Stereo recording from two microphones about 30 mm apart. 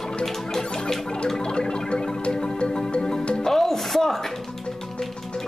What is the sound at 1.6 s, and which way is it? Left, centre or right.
Music, left.